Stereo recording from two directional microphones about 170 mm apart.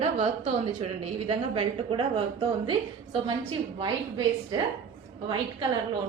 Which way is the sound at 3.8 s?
25° right (ahead or behind).